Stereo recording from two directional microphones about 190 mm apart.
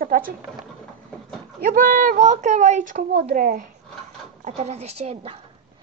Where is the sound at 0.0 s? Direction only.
50° right (ahead or behind).